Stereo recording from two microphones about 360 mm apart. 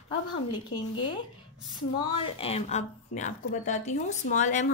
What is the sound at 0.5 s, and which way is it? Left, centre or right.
Speech, centre.